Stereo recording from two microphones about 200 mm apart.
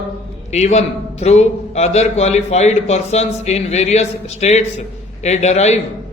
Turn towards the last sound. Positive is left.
turn(degrees=35)  # may be behind; listen again after turning